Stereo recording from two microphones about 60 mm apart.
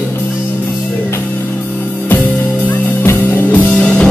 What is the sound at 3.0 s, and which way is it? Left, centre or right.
Music, left.